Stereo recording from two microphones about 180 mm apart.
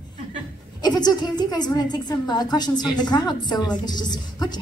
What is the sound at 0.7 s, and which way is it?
A woman's voice, 25° left (ahead or behind).